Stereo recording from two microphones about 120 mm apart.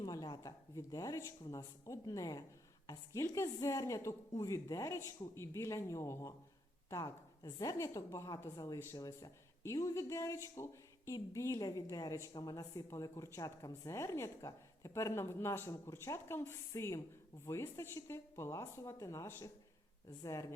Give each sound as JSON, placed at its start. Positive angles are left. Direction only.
{"t": 0.0, "sound": "a woman's voice", "side_deg": 30}